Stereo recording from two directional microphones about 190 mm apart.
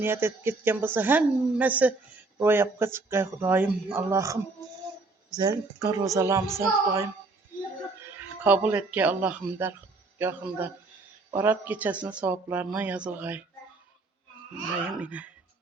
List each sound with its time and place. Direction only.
0.0 s speech: 10° right (ahead or behind)
5.4 s speech: 20° right (ahead or behind)
8.4 s speech: 10° right (ahead or behind)
14.9 s speech: 5° right (ahead or behind)